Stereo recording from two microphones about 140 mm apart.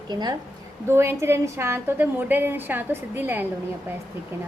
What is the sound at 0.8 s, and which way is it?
A woman's voice, 20° right (ahead or behind).